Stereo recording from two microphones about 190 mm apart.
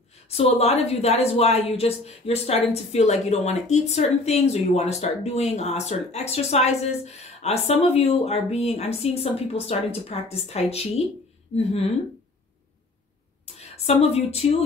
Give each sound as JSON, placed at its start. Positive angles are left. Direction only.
{"t": 0.3, "sound": "speech", "side_deg": 30}
{"t": 13.6, "sound": "a woman's voice", "side_deg": 35}